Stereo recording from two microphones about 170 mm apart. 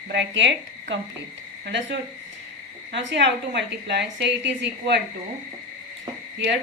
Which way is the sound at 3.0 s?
90° right.